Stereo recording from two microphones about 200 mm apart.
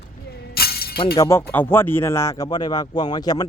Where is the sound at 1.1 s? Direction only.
15° left (ahead or behind).